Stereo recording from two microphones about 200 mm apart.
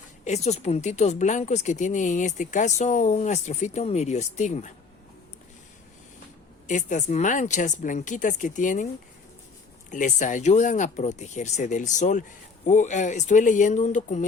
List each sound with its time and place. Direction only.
0.3 s speech: 35° left (ahead or behind)
6.7 s speech: 40° left (ahead or behind)
9.9 s speech: 40° left (ahead or behind)